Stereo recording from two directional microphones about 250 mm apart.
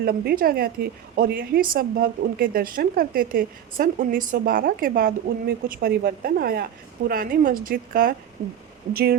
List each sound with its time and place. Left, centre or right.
0.0 s a woman's voice: right